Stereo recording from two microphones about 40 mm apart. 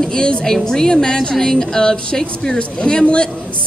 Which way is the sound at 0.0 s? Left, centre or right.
Left.